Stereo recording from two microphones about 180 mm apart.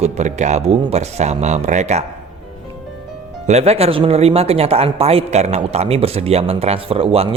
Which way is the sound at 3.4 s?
35° right (ahead or behind).